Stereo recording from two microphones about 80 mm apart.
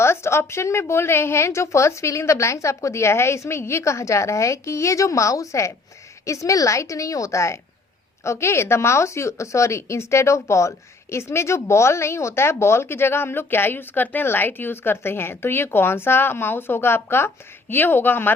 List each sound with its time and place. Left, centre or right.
0.0 s a woman's voice: left